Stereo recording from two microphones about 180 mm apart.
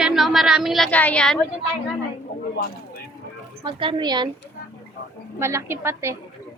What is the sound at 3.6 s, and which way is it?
Speech, 25° right (ahead or behind).